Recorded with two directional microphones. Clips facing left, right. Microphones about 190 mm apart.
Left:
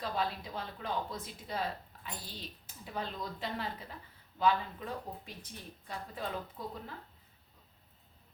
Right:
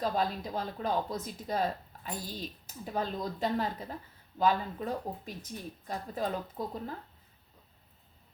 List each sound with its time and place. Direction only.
0.0 s speech: 40° right (ahead or behind)